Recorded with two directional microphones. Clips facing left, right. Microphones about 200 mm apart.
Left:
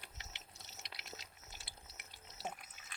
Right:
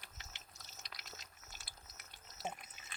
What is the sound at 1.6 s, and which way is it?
Water, 30° left (ahead or behind).